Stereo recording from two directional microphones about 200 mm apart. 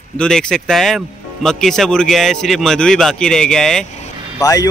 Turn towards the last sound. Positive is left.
turn(degrees=15)  # may be behind; listen again after turning